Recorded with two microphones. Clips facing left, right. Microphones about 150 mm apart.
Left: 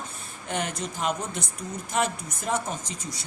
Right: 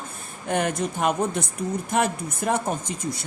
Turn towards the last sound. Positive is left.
turn(degrees=-55)  # may be behind; listen again after turning